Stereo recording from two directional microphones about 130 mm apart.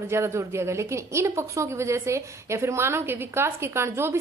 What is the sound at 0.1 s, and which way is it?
A woman's voice, 20° right (ahead or behind).